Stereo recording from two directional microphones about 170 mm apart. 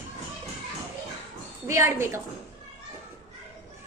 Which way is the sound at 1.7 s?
15° right (ahead or behind).